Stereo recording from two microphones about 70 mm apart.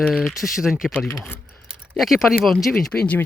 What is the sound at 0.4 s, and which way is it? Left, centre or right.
Speech, centre.